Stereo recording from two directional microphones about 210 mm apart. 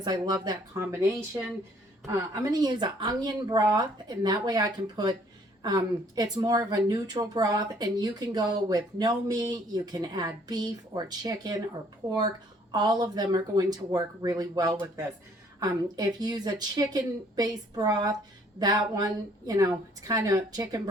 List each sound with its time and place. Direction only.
0.0 s speech: 20° right (ahead or behind)
2.0 s a woman's voice: 15° right (ahead or behind)